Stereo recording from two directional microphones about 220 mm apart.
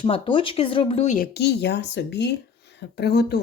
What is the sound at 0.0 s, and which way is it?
Speech, 25° left (ahead or behind).